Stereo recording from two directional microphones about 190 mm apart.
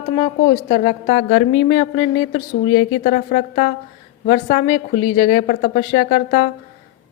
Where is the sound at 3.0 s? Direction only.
45° left (ahead or behind); by 5.4 s 30° left (ahead or behind).